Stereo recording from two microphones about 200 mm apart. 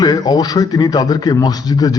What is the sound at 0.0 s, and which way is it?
A man's voice, 20° left (ahead or behind).